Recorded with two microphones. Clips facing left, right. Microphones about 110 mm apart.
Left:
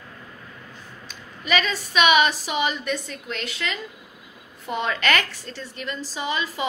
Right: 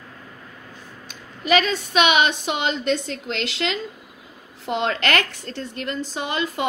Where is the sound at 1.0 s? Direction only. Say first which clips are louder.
Right 6 dB; 55° right (ahead or behind).